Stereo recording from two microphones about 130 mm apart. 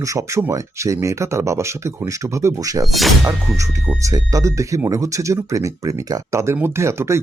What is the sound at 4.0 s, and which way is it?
Speech, 25° right (ahead or behind).